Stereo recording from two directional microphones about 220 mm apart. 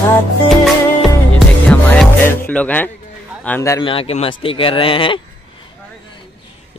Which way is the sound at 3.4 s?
10° left (ahead or behind).